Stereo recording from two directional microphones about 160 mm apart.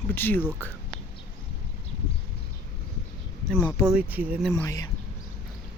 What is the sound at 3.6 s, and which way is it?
Speech, 15° left (ahead or behind).